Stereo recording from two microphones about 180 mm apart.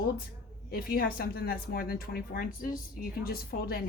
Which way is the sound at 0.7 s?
55° left (ahead or behind).